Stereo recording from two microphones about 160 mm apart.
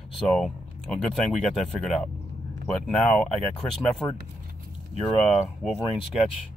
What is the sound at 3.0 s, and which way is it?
Speech, 5° left (ahead or behind).